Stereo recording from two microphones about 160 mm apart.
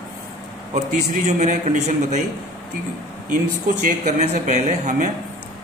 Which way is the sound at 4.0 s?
50° right (ahead or behind).